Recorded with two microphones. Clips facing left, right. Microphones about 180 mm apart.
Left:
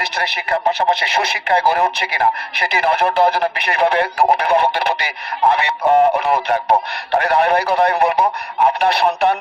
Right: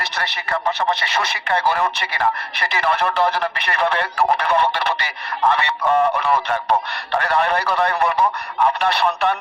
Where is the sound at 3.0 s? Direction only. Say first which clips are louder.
Left 4 dB; 45° left (ahead or behind).